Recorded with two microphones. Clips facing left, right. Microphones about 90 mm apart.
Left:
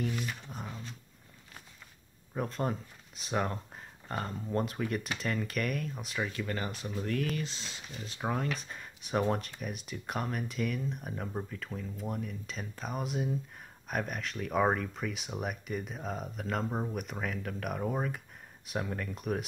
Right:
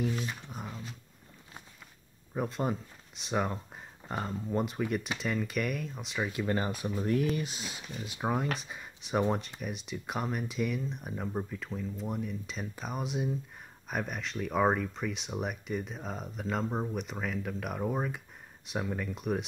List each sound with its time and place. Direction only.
0.3 s speech: centre (ahead or behind)
2.3 s speech: 5° right (ahead or behind)
6.2 s speech: 20° right (ahead or behind); by 19.4 s centre (ahead or behind)